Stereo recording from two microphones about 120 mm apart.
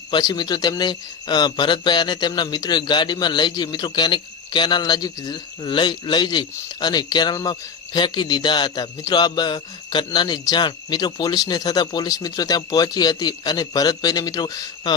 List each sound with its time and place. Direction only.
0.1 s speech: 35° left (ahead or behind)